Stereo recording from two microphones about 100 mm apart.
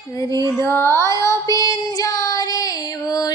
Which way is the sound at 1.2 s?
30° left (ahead or behind).